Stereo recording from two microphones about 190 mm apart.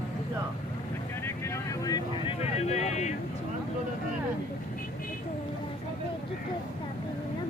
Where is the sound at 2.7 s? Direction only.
35° left (ahead or behind).